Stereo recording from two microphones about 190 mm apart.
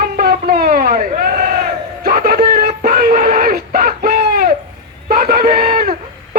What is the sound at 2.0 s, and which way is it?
Music, 50° right (ahead or behind).